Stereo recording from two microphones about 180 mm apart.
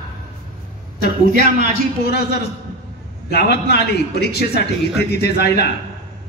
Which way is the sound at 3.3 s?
65° left (ahead or behind).